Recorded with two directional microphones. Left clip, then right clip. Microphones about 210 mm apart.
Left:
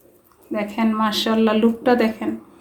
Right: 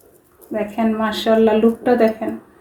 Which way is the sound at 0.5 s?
35° left (ahead or behind).